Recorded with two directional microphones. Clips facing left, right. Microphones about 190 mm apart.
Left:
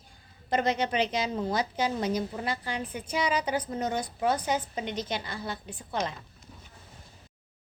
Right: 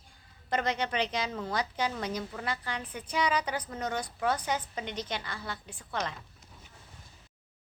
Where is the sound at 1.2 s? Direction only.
30° left (ahead or behind).